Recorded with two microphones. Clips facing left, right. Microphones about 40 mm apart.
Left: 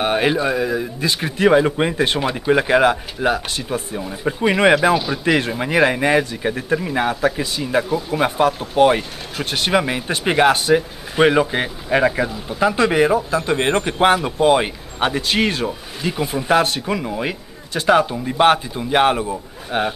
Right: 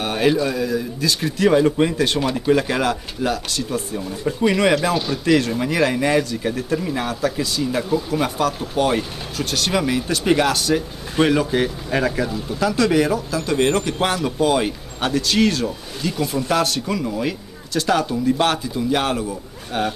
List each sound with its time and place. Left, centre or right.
0.0 s speech: left
4.9 s speech: centre
5.2 s speech: left